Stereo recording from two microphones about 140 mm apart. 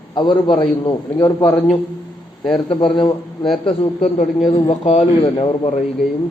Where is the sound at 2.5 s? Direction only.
40° left (ahead or behind).